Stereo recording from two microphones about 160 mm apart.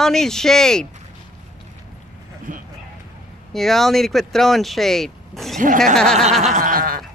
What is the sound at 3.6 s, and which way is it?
Speech, centre (ahead or behind).